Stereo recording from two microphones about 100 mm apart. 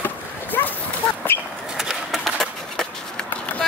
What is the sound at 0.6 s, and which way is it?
Dog, 25° left (ahead or behind).